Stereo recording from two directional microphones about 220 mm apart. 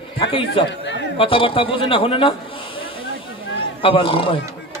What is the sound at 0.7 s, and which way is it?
Speech, 55° left (ahead or behind).